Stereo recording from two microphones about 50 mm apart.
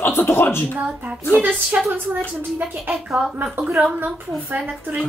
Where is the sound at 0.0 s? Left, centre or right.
Left.